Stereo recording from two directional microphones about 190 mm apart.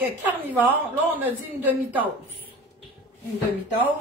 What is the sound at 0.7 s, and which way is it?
A woman's voice, 10° right (ahead or behind).